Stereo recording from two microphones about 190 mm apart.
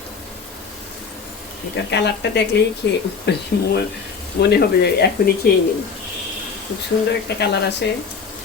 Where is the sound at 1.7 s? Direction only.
65° left (ahead or behind).